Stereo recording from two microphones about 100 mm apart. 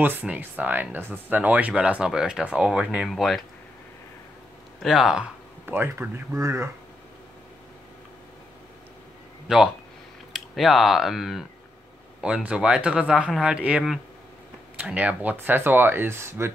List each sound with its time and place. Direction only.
0.0 s speech: 15° right (ahead or behind); by 3.4 s centre (ahead or behind)
4.8 s speech: 5° right (ahead or behind)
5.7 s speech: 20° right (ahead or behind)
9.5 s speech: 10° right (ahead or behind); by 16.5 s 25° right (ahead or behind)